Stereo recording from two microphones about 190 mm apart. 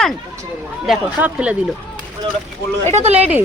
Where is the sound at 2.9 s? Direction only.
35° right (ahead or behind).